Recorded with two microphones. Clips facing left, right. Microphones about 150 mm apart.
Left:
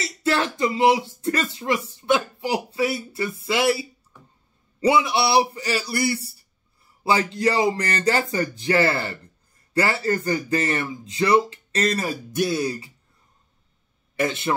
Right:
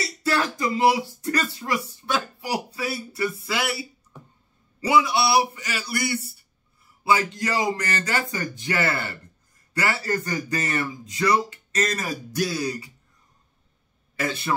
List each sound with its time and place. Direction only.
0.2 s speech: 25° left (ahead or behind)
4.7 s speech: 25° left (ahead or behind)
14.1 s speech: 25° left (ahead or behind)